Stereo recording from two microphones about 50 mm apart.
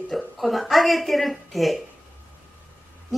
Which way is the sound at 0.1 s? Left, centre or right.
Centre.